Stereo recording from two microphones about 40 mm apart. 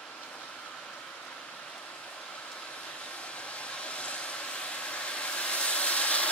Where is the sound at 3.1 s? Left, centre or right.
Left.